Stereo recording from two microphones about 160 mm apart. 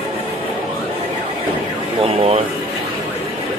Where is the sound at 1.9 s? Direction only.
40° right (ahead or behind).